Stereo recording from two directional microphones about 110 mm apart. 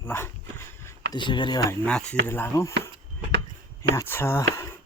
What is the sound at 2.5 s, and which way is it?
Speech, 25° left (ahead or behind).